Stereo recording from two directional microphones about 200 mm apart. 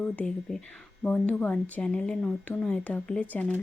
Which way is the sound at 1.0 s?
5° left (ahead or behind).